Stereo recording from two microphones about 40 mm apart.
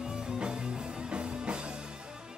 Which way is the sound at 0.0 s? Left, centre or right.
Centre.